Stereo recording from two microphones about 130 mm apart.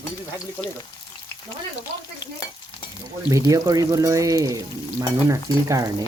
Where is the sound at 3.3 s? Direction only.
25° right (ahead or behind).